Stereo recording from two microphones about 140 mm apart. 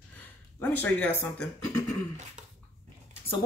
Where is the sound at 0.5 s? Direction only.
10° left (ahead or behind).